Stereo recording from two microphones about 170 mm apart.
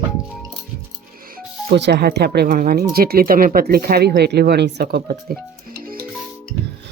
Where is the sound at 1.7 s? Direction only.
80° right; by 5.9 s 60° right (ahead or behind).